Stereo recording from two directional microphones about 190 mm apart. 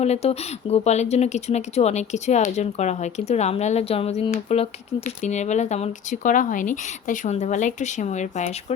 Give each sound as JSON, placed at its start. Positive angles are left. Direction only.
{"t": 0.0, "sound": "speech", "side_deg": 35}